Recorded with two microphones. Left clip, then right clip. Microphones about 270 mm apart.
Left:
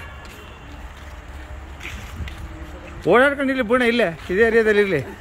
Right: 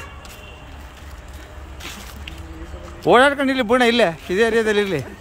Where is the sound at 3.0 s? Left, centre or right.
Centre.